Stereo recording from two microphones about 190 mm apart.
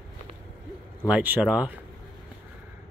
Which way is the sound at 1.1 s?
5° right (ahead or behind).